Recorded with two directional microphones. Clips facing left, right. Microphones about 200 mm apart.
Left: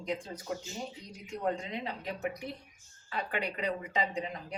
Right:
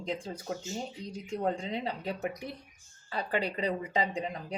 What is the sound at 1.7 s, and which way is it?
Speech, 35° right (ahead or behind).